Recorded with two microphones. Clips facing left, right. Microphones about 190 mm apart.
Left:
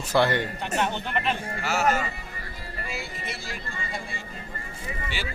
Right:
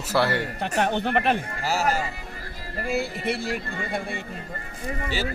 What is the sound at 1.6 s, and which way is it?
Speech, 35° right (ahead or behind).